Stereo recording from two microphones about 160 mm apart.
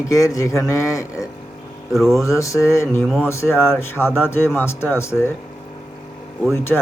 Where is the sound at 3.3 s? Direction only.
15° left (ahead or behind).